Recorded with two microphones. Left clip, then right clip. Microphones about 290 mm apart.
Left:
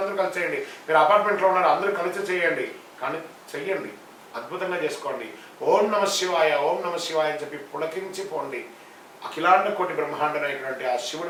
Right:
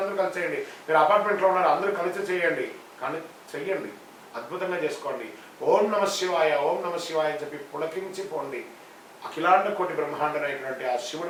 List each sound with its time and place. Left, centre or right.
0.0 s a man's voice: centre
9.3 s a man's voice: centre